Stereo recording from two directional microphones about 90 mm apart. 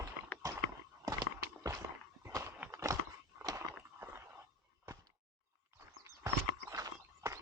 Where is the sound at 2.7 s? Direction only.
35° right (ahead or behind).